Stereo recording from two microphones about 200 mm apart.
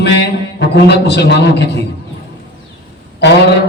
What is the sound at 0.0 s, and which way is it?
A man's voice, 60° left (ahead or behind).